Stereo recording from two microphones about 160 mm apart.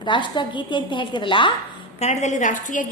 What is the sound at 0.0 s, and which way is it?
A woman's voice, 30° left (ahead or behind).